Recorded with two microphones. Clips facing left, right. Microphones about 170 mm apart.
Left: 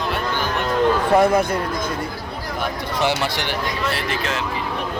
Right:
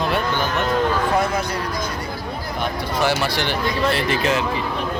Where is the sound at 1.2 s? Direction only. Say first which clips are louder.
Left 6 dB; 55° left (ahead or behind).